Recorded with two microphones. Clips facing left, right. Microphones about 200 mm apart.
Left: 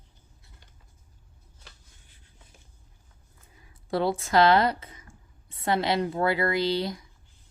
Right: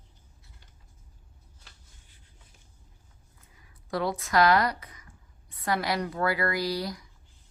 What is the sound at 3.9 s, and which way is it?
Speech, 30° left (ahead or behind).